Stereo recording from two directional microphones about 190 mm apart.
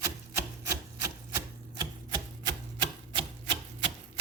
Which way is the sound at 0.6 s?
15° right (ahead or behind).